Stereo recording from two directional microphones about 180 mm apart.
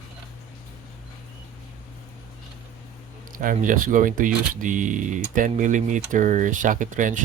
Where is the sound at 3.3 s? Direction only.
50° right (ahead or behind).